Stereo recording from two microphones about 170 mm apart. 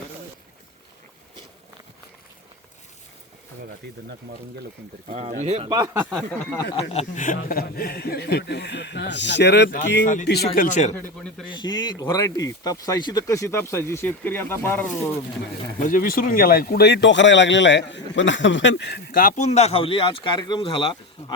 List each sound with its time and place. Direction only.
5.0 s speech: 40° right (ahead or behind)
6.1 s speech: 5° left (ahead or behind)
6.7 s speech: 40° left (ahead or behind)
7.4 s speech: 60° left (ahead or behind); by 10.1 s 90° left
10.2 s speech: 65° left (ahead or behind); by 10.9 s 45° left (ahead or behind)
10.9 s speech: 10° left (ahead or behind)
11.6 s speech: 25° left (ahead or behind); by 15.1 s 10° left (ahead or behind)
15.8 s speech: 55° left (ahead or behind); by 21.3 s 30° left (ahead or behind)